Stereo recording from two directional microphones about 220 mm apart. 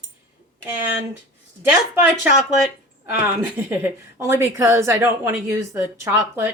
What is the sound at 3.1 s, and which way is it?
A woman's voice, 10° right (ahead or behind).